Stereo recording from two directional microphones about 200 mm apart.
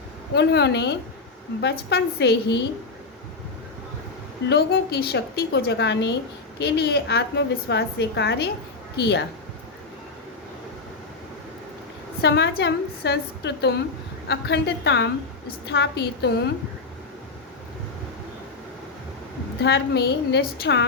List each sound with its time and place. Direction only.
0.3 s a woman's voice: 60° left (ahead or behind)
4.4 s a woman's voice: 55° left (ahead or behind)
12.2 s a woman's voice: 55° left (ahead or behind)
19.6 s a woman's voice: 55° left (ahead or behind)